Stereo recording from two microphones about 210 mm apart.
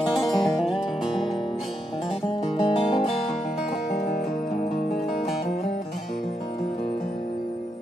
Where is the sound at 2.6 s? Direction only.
25° left (ahead or behind).